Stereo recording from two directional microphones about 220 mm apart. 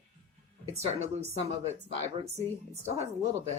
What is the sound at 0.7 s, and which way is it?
Speech, 30° right (ahead or behind).